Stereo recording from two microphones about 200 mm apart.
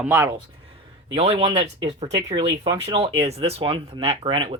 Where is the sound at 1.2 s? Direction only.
30° right (ahead or behind).